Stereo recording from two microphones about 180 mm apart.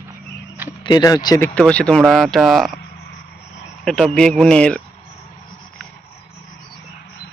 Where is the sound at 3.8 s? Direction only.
5° left (ahead or behind).